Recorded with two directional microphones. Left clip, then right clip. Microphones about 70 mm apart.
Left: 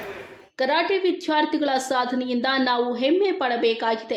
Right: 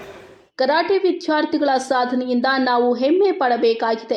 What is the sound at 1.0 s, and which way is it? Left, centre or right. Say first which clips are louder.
A woman's voice: right 3 dB; right.